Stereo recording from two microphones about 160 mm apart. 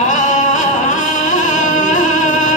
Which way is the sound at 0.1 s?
50° left (ahead or behind).